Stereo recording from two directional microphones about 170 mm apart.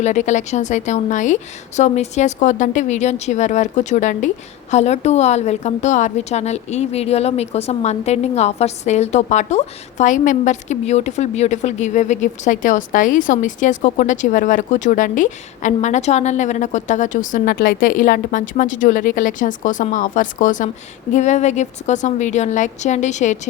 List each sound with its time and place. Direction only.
0.0 s a woman's voice: 45° left (ahead or behind)